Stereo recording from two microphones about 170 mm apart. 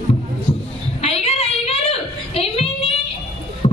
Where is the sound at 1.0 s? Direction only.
35° left (ahead or behind).